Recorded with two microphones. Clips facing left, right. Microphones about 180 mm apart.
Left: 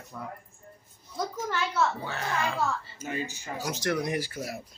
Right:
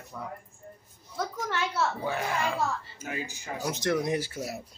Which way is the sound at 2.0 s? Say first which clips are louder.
Right 2 dB; 10° right (ahead or behind).